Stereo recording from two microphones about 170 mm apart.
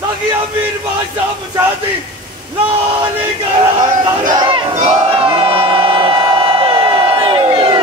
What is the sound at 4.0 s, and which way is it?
Speech, 25° right (ahead or behind).